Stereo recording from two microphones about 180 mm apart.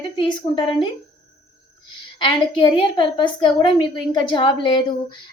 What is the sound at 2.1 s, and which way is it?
A woman's voice, 25° left (ahead or behind).